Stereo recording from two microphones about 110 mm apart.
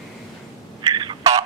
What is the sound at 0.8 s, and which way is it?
Fowl, 45° right (ahead or behind).